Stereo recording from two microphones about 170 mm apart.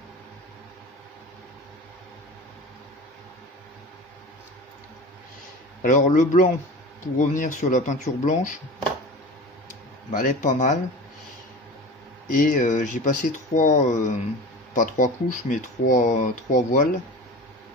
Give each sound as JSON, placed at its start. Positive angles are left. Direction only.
{"t": 5.8, "sound": "speech", "side_deg": 50}
{"t": 10.1, "sound": "speech", "side_deg": 50}
{"t": 12.3, "sound": "speech", "side_deg": 55}